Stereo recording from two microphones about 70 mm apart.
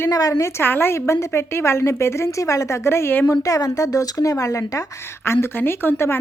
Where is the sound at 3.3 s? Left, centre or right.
Left.